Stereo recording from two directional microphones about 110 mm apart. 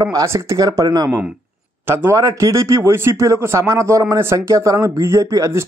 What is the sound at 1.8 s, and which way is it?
A man's voice, 25° right (ahead or behind).